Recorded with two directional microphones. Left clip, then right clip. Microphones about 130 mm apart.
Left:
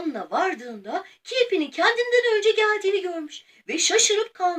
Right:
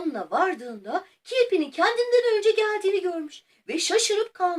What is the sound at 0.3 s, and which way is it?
Speech, 5° left (ahead or behind).